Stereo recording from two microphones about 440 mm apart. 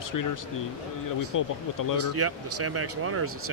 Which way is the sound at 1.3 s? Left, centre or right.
Left.